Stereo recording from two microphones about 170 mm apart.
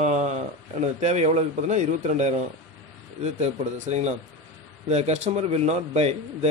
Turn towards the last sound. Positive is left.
turn(degrees=-40)  # may be behind; listen again after turning